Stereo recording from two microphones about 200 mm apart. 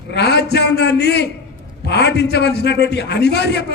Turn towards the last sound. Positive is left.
turn(degrees=55)  # may be behind; listen again after turning